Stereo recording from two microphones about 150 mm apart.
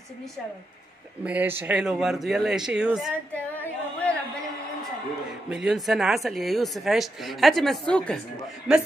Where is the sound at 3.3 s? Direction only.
10° left (ahead or behind).